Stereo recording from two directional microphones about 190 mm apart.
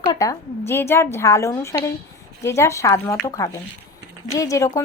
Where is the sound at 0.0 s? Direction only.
20° left (ahead or behind).